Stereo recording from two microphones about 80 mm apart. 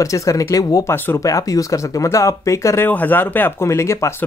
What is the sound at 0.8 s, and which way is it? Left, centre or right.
Speech, left.